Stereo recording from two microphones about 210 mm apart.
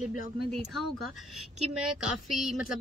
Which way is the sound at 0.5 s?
Centre (ahead or behind).